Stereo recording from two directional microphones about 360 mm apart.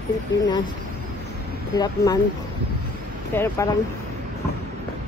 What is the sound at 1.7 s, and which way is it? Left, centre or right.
Speech, centre.